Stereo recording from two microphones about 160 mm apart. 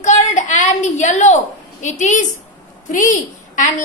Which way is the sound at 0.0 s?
45° left (ahead or behind).